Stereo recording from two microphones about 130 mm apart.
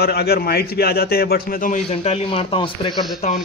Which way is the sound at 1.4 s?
90° left.